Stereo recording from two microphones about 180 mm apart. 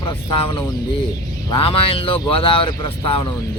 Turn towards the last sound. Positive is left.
turn(degrees=25)  # may be behind; listen again after turning